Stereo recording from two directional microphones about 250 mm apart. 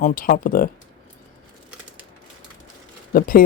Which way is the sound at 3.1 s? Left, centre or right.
Left.